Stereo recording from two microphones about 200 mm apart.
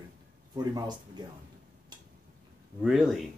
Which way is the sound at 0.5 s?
20° right (ahead or behind).